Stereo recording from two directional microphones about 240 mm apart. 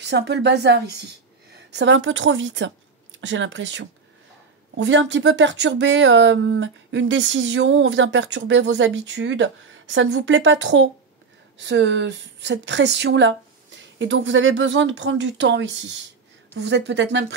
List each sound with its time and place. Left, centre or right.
0.0 s speech: right